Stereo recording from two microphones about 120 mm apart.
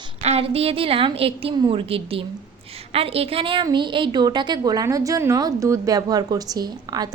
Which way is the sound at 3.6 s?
40° right (ahead or behind).